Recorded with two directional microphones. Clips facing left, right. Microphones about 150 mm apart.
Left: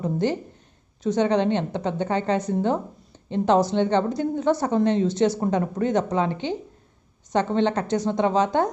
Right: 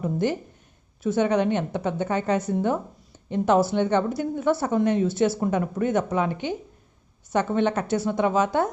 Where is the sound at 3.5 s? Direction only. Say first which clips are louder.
Left 1 dB; 20° left (ahead or behind).